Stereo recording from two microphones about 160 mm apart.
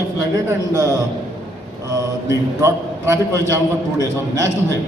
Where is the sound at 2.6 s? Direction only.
15° right (ahead or behind).